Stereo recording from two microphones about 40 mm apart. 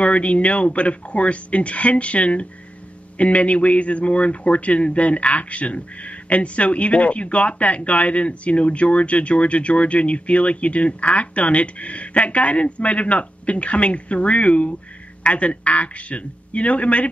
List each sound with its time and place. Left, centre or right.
0.0 s a man's voice: left